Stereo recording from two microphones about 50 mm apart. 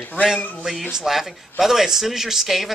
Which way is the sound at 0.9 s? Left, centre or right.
Centre.